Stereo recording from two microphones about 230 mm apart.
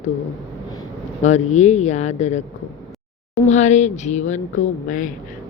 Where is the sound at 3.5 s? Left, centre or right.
Left.